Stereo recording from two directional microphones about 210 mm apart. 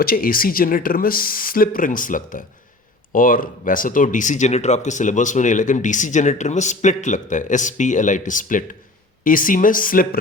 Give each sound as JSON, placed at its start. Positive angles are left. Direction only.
{"t": 0.0, "sound": "speech", "side_deg": 45}